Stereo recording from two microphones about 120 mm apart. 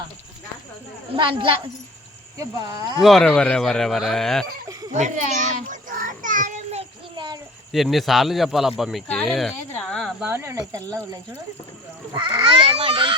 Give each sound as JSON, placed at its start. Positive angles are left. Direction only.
{"t": 1.1, "sound": "a child's voice", "side_deg": -45}
{"t": 2.4, "sound": "speech", "side_deg": -30}
{"t": 3.0, "sound": "speech", "side_deg": 5}
{"t": 4.9, "sound": "a sound", "side_deg": -85}
{"t": 7.7, "sound": "speech", "side_deg": 0}
{"t": 9.9, "sound": "a sound", "side_deg": 0}
{"t": 10.2, "sound": "speech", "side_deg": -20}
{"t": 12.1, "sound": "a child's voice", "side_deg": -40}
{"t": 12.6, "sound": "a child's voice", "side_deg": -50}